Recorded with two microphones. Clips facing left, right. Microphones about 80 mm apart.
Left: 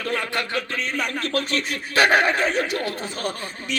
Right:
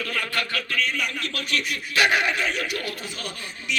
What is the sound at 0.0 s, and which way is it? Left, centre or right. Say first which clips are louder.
A man's voice: left 3 dB; left.